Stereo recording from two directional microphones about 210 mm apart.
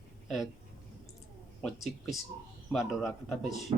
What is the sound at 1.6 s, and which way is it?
Speech, centre (ahead or behind).